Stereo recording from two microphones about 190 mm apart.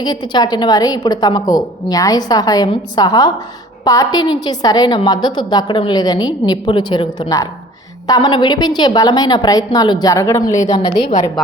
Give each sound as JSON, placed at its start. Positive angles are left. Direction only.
{"t": 0.0, "sound": "a woman's voice", "side_deg": 20}